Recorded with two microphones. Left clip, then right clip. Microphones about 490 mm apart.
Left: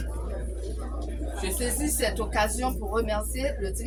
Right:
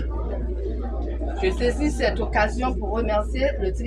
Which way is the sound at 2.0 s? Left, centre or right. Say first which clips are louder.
Right 3 dB; left.